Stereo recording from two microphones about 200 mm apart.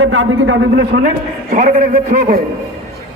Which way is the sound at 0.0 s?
80° right.